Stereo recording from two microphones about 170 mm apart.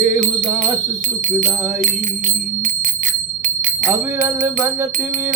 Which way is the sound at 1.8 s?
45° right (ahead or behind).